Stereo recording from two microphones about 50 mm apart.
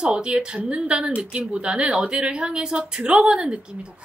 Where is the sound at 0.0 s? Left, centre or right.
Centre.